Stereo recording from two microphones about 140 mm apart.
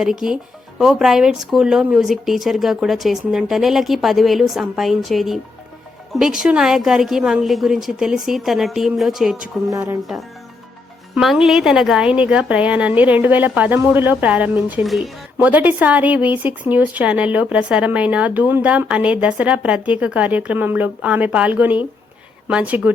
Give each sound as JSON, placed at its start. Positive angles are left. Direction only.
{"t": 0.0, "sound": "speech", "side_deg": -5}
{"t": 9.6, "sound": "speech", "side_deg": -20}
{"t": 11.1, "sound": "speech", "side_deg": 0}